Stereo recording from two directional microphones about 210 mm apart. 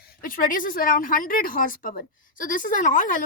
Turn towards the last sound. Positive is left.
turn(degrees=40)  # may be behind; listen again after turning